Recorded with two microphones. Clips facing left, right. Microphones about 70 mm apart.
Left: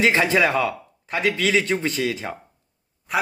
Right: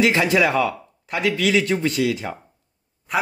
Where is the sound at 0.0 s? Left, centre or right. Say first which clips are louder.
Right 1 dB; left.